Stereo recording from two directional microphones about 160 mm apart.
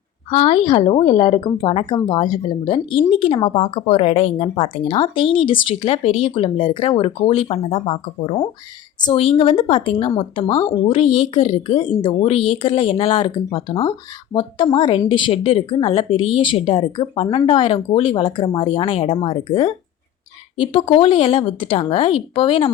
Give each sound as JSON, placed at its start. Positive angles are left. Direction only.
{"t": 0.3, "sound": "speech", "side_deg": 35}